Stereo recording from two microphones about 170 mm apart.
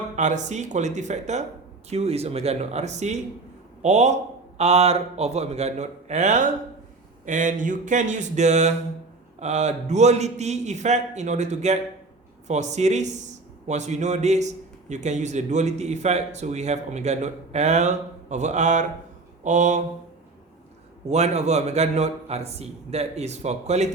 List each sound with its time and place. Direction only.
0.2 s a man's voice: 45° right (ahead or behind)
19.4 s mantra: 45° right (ahead or behind)
21.1 s a man's voice: 40° right (ahead or behind)